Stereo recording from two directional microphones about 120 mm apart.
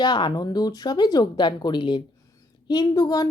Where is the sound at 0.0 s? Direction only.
40° left (ahead or behind).